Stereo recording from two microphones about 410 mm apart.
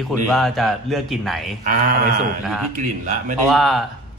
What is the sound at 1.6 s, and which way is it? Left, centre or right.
Speech, centre.